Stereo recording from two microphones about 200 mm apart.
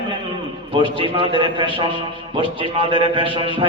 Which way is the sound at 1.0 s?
25° right (ahead or behind).